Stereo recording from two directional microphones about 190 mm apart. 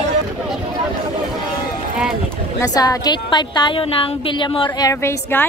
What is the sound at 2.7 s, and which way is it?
A woman's voice, 20° left (ahead or behind).